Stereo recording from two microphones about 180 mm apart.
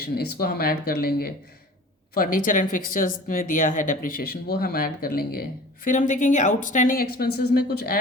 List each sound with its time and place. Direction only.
0.2 s speech: 60° left (ahead or behind)